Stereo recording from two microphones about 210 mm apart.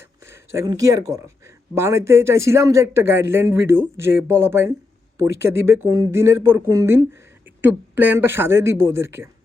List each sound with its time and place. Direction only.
0.3 s a man's voice: 15° right (ahead or behind)